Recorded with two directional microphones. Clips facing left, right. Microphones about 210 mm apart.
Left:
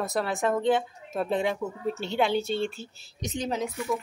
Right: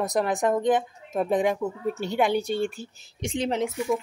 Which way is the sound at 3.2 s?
30° right (ahead or behind).